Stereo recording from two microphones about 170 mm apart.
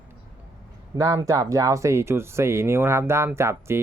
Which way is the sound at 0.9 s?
20° right (ahead or behind).